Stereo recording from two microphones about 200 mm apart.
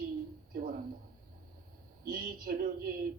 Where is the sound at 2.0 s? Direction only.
45° right (ahead or behind).